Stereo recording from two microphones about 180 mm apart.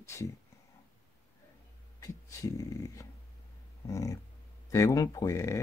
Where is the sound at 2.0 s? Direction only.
20° left (ahead or behind).